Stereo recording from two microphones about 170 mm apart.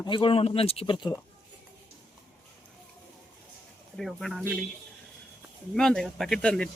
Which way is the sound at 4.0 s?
Centre (ahead or behind).